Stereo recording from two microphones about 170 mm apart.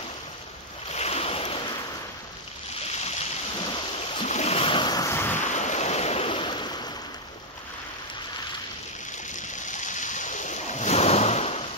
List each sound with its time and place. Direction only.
0.9 s waves: 40° left (ahead or behind)
3.5 s a sound: 30° left (ahead or behind)
4.1 s waves: 40° left (ahead or behind); by 5.4 s 15° left (ahead or behind)
5.4 s waves: 45° left (ahead or behind); by 6.9 s 25° left (ahead or behind)
9.3 s ocean: 45° left (ahead or behind)